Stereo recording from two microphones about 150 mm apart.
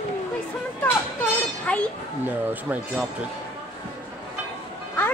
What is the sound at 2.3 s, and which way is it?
Speech, 10° right (ahead or behind).